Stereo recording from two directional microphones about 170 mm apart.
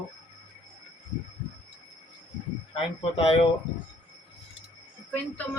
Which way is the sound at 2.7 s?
35° left (ahead or behind).